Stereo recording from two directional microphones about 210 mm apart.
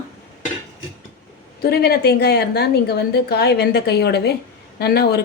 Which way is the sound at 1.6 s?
50° left (ahead or behind).